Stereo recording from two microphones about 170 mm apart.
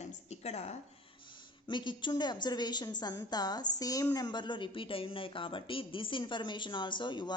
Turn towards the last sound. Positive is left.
turn(degrees=25)  # may be behind; listen again after turning